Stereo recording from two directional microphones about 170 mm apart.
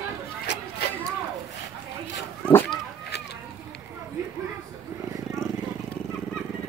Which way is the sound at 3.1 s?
75° left (ahead or behind).